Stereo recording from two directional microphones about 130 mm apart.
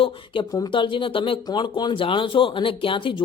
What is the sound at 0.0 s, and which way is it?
Speech, 35° left (ahead or behind).